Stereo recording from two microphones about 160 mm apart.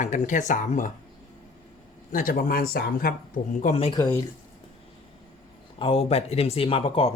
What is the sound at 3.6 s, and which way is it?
Speech, 40° left (ahead or behind).